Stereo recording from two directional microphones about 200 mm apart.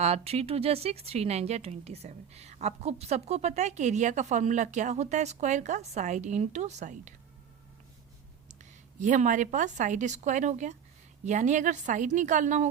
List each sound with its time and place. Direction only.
0.0 s speech: 30° right (ahead or behind)
8.4 s a woman's voice: 35° right (ahead or behind)